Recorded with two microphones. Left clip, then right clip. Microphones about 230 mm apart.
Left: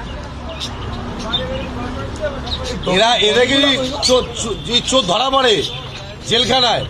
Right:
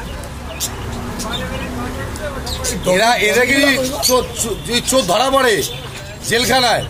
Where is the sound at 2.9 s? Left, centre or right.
Right.